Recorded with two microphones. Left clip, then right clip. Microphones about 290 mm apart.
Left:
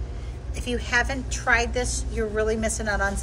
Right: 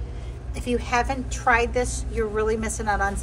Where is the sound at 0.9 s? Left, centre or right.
Centre.